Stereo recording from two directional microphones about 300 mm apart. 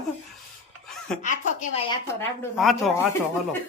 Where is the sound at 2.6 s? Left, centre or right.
Centre.